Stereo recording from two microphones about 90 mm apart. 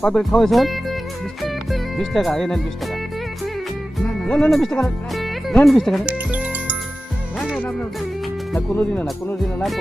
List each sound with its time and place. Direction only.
0.0 s speech: 5° left (ahead or behind)
4.0 s speech: 10° left (ahead or behind)
5.1 s music: centre (ahead or behind)
5.6 s speech: centre (ahead or behind)
6.1 s music: 15° right (ahead or behind)
7.6 s speech: 20° left (ahead or behind)